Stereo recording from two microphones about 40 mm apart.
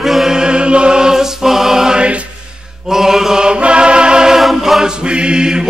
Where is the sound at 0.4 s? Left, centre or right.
Right.